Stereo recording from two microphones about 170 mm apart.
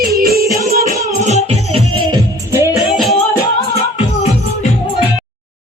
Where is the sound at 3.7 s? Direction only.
40° left (ahead or behind).